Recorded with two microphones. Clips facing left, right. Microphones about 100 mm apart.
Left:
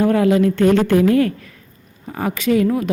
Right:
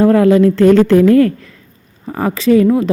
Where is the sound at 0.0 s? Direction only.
40° right (ahead or behind).